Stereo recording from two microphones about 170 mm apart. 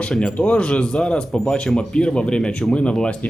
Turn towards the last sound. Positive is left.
turn(degrees=5)  # may be behind; listen again after turning